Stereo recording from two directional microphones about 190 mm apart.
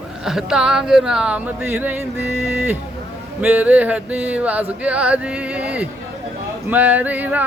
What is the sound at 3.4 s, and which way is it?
Male singing, 10° right (ahead or behind).